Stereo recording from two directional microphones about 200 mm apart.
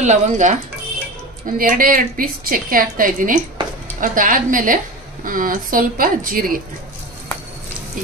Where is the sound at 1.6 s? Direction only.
45° right (ahead or behind).